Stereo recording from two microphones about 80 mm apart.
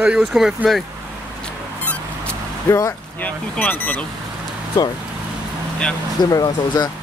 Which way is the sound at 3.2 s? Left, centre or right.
Centre.